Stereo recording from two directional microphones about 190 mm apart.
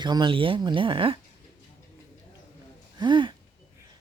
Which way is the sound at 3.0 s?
25° right (ahead or behind).